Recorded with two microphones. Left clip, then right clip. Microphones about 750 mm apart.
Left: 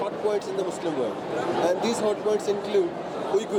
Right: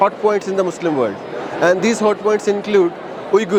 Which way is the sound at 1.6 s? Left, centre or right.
Right.